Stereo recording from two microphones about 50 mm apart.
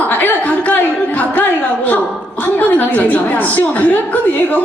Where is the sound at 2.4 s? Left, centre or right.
Left.